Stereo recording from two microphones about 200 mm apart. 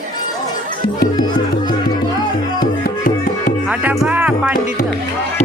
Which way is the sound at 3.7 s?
5° right (ahead or behind).